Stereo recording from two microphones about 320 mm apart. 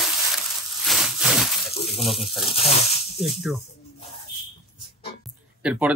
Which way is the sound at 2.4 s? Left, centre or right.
Centre.